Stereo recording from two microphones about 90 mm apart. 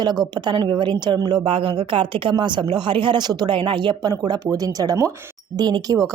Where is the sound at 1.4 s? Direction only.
80° right.